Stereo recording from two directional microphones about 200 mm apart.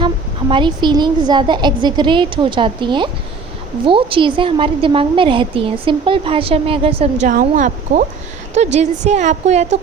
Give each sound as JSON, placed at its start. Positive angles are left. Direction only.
{"t": 0.5, "sound": "a woman's voice", "side_deg": -25}
{"t": 7.3, "sound": "a woman's voice", "side_deg": -40}